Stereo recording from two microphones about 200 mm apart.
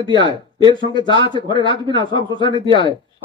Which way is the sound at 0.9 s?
20° left (ahead or behind).